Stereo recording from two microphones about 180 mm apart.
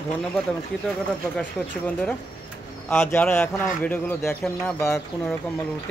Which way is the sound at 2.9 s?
10° left (ahead or behind).